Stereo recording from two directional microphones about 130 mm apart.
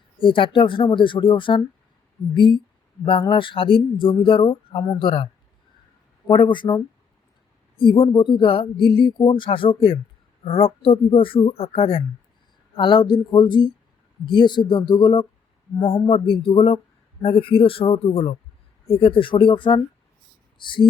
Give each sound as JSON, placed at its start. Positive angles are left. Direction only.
{"t": 0.2, "sound": "speech", "side_deg": 40}
{"t": 7.8, "sound": "speech", "side_deg": 40}